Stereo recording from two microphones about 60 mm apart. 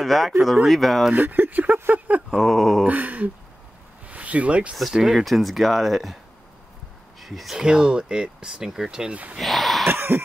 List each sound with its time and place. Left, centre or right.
0.0 s speech: centre
1.1 s speech: right
2.3 s speech: centre
2.8 s a sound: right
4.1 s speech: right
4.7 s speech: centre
7.2 s speech: centre
9.4 s speech: centre
9.8 s a sound: right